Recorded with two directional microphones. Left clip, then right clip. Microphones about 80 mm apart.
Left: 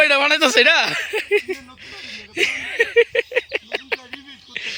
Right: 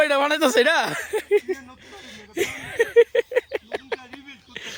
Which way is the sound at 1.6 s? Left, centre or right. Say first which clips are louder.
Left 5 dB; right.